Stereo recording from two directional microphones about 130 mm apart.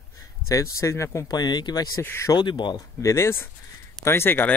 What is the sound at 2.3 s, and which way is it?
Speech, 35° left (ahead or behind).